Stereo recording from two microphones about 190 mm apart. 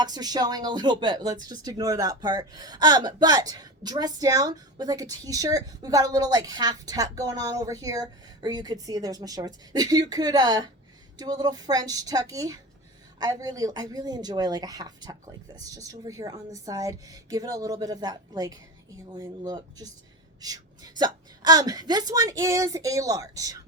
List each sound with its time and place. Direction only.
0.0 s speech: 20° right (ahead or behind)